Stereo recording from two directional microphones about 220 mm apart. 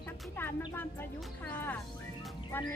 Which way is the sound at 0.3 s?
10° left (ahead or behind).